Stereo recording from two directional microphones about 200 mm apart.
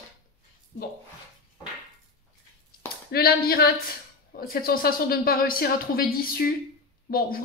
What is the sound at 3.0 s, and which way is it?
A woman's voice, 50° left (ahead or behind).